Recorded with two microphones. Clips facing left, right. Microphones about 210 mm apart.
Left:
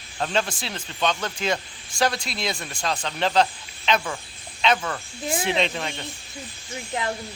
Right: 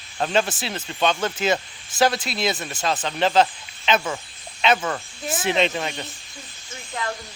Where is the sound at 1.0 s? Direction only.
25° right (ahead or behind).